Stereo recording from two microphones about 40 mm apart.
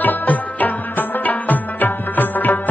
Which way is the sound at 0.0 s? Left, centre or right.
Left.